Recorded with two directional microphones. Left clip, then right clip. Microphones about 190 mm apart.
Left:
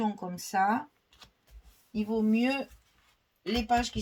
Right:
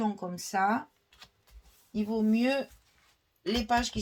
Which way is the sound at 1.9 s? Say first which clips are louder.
Even; 30° right (ahead or behind).